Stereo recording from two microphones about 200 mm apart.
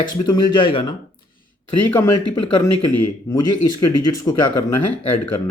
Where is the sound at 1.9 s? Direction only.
10° left (ahead or behind).